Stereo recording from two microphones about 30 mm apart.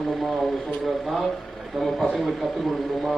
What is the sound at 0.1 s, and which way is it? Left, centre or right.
Speech, centre.